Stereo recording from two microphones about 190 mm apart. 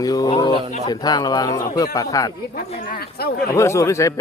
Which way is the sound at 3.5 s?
15° left (ahead or behind).